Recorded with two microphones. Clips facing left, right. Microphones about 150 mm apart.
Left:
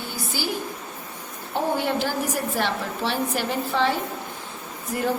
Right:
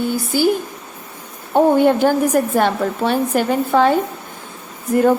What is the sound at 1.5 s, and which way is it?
A woman's voice, 55° right (ahead or behind).